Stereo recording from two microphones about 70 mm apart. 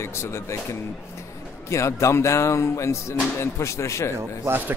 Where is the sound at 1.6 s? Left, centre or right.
Left.